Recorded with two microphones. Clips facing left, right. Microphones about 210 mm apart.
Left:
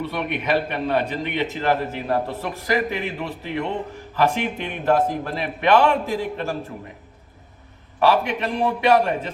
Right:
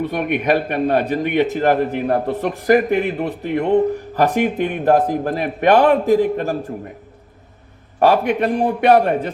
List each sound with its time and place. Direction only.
0.0 s speech: 50° right (ahead or behind)
7.9 s speech: 50° right (ahead or behind)